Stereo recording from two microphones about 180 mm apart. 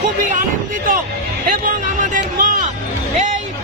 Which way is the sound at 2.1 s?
50° right (ahead or behind).